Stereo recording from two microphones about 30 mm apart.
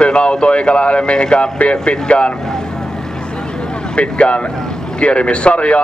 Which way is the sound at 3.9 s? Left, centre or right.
Left.